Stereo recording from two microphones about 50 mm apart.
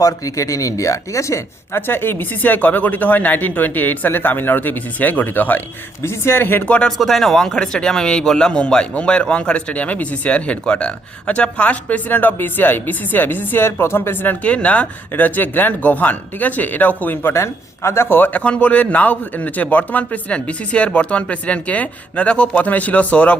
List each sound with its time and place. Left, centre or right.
0.3 s speech: left
1.7 s speech: left
6.0 s a man's voice: left
6.8 s speech: centre; by 14.2 s left
14.4 s speech: left
15.1 s speech: left
17.3 s a man's voice: left
18.6 s speech: left
20.3 s speech: left